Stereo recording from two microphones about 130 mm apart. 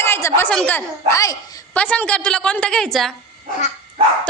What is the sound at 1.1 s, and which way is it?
Speech, 25° left (ahead or behind).